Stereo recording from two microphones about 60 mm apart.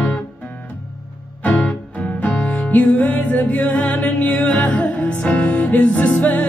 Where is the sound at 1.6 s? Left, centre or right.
Left.